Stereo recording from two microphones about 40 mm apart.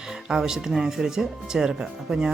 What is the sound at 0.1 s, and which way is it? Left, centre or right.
Speech, centre.